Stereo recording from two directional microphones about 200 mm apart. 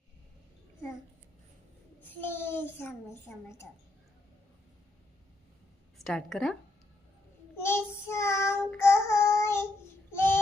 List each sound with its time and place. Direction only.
2.0 s a child's voice: 10° left (ahead or behind)
6.0 s speech: centre (ahead or behind)
7.5 s child singing: 10° left (ahead or behind)
10.1 s a sound: 10° left (ahead or behind)